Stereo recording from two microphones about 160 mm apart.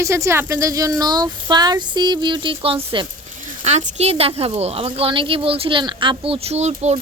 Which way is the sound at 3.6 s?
45° right (ahead or behind).